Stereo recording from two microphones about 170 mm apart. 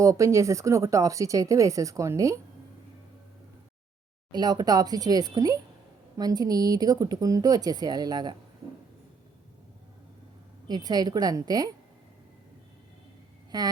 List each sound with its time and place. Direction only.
0.0 s speech: 20° right (ahead or behind)
4.3 s speech: 25° right (ahead or behind)
10.7 s speech: 25° right (ahead or behind)
13.5 s speech: 25° right (ahead or behind)